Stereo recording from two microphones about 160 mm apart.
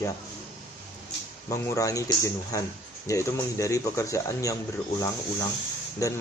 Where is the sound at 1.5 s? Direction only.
20° left (ahead or behind).